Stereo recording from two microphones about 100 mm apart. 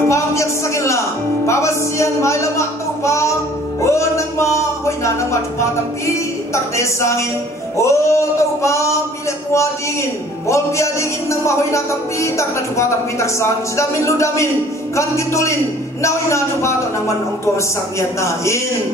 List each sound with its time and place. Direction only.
0.1 s music: 30° left (ahead or behind)
10.5 s music: 30° left (ahead or behind)
17.9 s music: 30° left (ahead or behind)